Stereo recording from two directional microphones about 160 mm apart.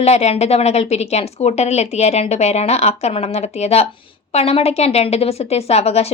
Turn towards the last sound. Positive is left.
turn(degrees=40)  # may be behind; listen again after turning